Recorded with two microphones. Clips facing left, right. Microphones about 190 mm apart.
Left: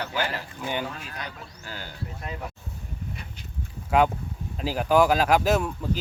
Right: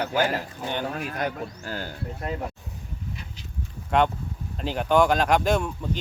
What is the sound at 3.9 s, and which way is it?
Speech, 5° left (ahead or behind).